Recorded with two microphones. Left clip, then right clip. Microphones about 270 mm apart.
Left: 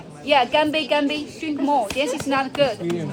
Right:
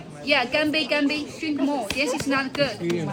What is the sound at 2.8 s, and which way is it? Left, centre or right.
Speech, centre.